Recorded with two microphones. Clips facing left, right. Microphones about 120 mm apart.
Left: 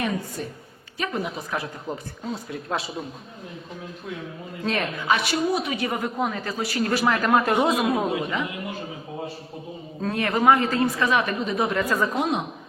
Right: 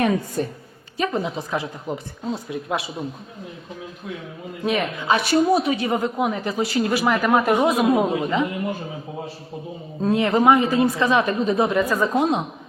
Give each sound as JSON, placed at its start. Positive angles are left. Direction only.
{"t": 0.4, "sound": "a woman's voice", "side_deg": -55}
{"t": 0.9, "sound": "speech", "side_deg": -30}
{"t": 4.6, "sound": "speech", "side_deg": -15}
{"t": 5.1, "sound": "a woman's voice", "side_deg": -40}
{"t": 10.0, "sound": "speech", "side_deg": -20}
{"t": 12.1, "sound": "speech", "side_deg": -25}